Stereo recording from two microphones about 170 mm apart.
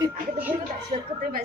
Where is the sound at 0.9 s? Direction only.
40° right (ahead or behind).